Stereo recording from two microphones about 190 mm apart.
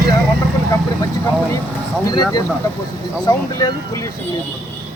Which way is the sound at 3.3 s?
20° left (ahead or behind).